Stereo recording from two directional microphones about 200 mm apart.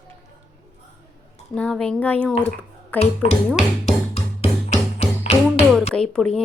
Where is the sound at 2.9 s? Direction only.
30° left (ahead or behind).